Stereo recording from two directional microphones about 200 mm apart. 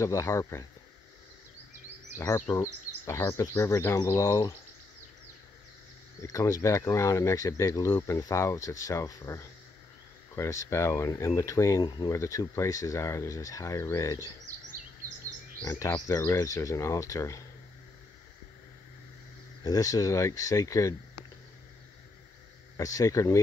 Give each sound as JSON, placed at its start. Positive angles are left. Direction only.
{"t": 0.0, "sound": "speech", "side_deg": 15}
{"t": 2.1, "sound": "speech", "side_deg": 10}
{"t": 6.2, "sound": "speech", "side_deg": 15}
{"t": 15.6, "sound": "speech", "side_deg": 15}
{"t": 19.6, "sound": "speech", "side_deg": 15}
{"t": 22.8, "sound": "speech", "side_deg": 15}